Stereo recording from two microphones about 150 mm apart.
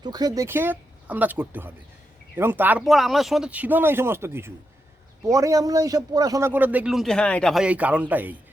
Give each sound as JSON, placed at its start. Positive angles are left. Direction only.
{"t": 0.0, "sound": "speech", "side_deg": -25}
{"t": 0.4, "sound": "speech", "side_deg": -15}
{"t": 2.8, "sound": "speech", "side_deg": 0}
{"t": 7.6, "sound": "speech", "side_deg": -10}